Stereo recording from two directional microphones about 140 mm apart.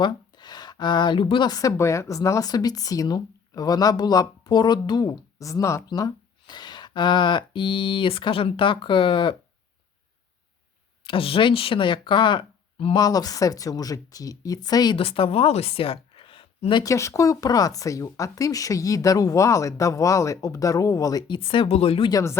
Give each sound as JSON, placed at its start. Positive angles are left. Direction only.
{"t": 0.0, "sound": "speech", "side_deg": 30}
{"t": 11.0, "sound": "speech", "side_deg": 40}
{"t": 14.9, "sound": "speech", "side_deg": 40}
{"t": 16.8, "sound": "speech", "side_deg": 20}
{"t": 22.1, "sound": "speech", "side_deg": 20}